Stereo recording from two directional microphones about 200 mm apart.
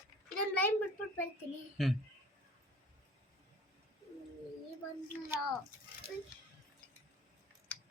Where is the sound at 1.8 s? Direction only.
Centre (ahead or behind).